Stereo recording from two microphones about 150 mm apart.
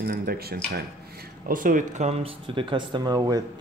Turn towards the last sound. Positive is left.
turn(degrees=-25)  # may be behind; listen again after turning